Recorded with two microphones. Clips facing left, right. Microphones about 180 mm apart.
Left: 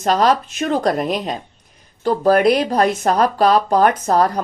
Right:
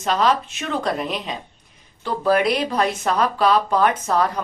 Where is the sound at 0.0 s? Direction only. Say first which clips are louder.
Left 4 dB; 40° left (ahead or behind).